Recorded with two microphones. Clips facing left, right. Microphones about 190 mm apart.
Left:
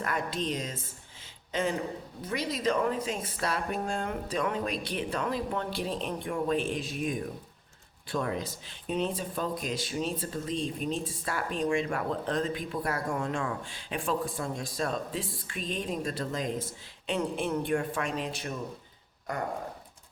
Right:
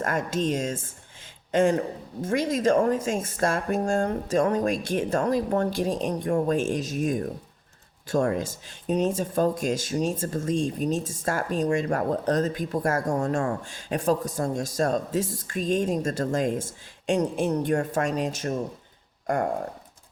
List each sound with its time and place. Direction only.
0.0 s speech: 45° right (ahead or behind)